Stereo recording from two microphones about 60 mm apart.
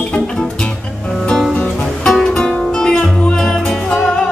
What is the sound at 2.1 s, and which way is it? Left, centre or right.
Music, centre.